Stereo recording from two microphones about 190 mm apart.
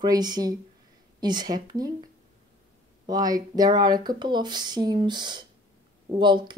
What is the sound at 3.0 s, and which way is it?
Speech, 20° right (ahead or behind).